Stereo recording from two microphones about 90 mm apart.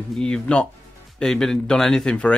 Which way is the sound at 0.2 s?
10° left (ahead or behind).